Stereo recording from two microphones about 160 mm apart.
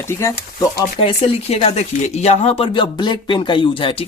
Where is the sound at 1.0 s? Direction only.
40° left (ahead or behind).